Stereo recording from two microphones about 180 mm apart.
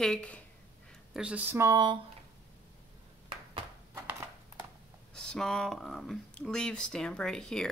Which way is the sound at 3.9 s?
10° right (ahead or behind).